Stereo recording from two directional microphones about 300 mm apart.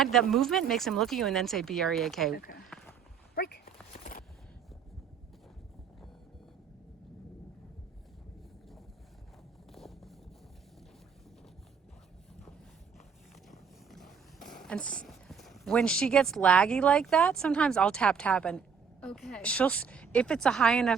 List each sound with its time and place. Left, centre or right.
0.0 s speech: centre
2.3 s speech: left
3.3 s horse: left
9.7 s vehicle: centre
13.5 s speech: centre